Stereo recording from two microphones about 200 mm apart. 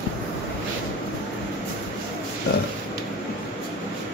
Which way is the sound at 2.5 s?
50° left (ahead or behind).